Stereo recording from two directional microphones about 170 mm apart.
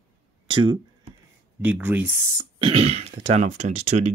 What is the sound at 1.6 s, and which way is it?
Speech, 10° right (ahead or behind).